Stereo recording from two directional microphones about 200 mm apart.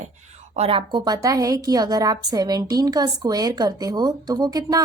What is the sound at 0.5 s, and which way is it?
A woman's voice, 30° right (ahead or behind).